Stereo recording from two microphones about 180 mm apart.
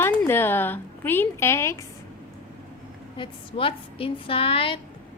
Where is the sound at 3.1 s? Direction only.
30° left (ahead or behind).